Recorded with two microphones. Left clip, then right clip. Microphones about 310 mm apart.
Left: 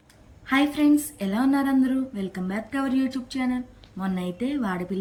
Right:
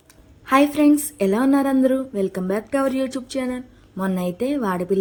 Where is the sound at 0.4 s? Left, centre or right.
Centre.